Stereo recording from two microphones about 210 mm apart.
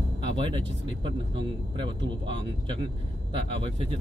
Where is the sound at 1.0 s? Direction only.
25° right (ahead or behind).